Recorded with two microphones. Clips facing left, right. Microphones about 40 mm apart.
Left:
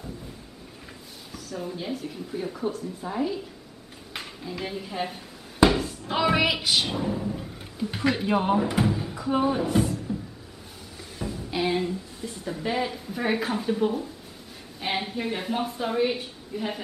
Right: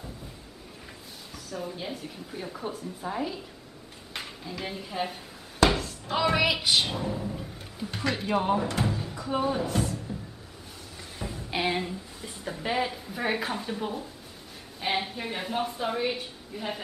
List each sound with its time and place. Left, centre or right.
1.3 s a woman's voice: centre
11.3 s a sound: right
11.7 s a woman's voice: centre